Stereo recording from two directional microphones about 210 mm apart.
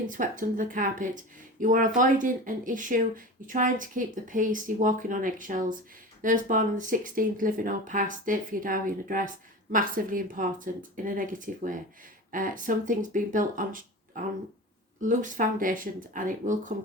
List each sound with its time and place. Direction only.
0.1 s speech: 40° right (ahead or behind)